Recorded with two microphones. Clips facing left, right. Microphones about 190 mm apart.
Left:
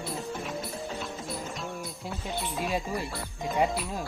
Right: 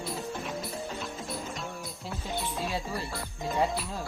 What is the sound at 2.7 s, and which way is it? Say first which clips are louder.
Speech: left 3 dB; 15° left (ahead or behind).